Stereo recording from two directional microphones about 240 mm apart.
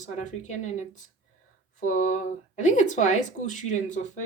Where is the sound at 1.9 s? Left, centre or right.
Left.